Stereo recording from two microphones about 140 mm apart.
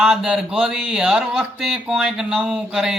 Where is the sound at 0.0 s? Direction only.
5° right (ahead or behind).